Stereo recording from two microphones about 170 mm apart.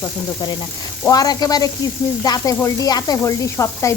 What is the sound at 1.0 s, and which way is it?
Sizzle, 20° left (ahead or behind).